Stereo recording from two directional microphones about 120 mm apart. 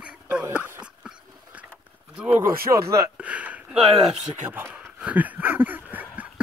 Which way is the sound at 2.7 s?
25° right (ahead or behind).